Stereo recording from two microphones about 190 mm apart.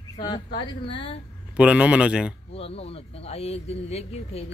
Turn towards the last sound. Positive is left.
turn(degrees=35)  # may be behind; listen again after turning